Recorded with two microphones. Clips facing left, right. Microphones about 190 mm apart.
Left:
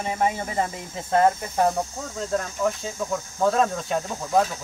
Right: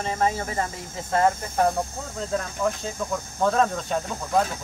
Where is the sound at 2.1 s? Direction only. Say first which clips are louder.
Left 1 dB; centre (ahead or behind).